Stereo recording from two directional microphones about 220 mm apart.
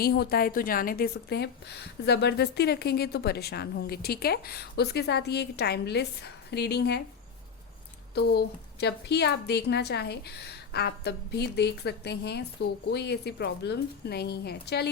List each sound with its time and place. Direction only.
0.0 s a woman's voice: 45° left (ahead or behind)
8.1 s a woman's voice: 50° left (ahead or behind)